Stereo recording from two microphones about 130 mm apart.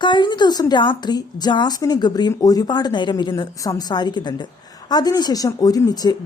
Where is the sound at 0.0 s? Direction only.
35° left (ahead or behind).